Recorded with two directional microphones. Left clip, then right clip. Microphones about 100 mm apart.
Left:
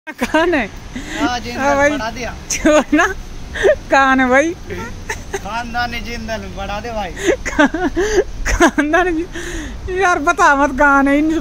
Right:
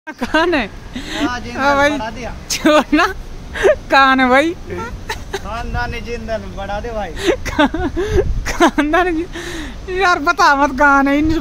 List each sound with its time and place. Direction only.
0.2 s speech: centre (ahead or behind)
1.3 s speech: 35° right (ahead or behind)
2.5 s speech: 5° right (ahead or behind)
4.7 s a sound: centre (ahead or behind)
5.5 s speech: 30° right (ahead or behind)
7.2 s speech: centre (ahead or behind)
7.7 s speech: 20° left (ahead or behind)